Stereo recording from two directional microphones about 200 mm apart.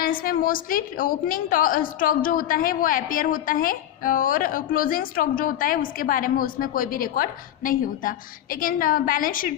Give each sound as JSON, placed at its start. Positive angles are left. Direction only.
{"t": 0.0, "sound": "a woman's voice", "side_deg": 45}